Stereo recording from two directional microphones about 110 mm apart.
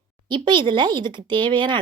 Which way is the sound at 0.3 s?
45° right (ahead or behind).